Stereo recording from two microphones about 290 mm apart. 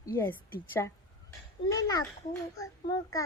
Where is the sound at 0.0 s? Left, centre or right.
Centre.